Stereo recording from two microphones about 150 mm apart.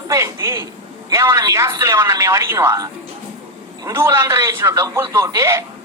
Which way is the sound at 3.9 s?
20° right (ahead or behind).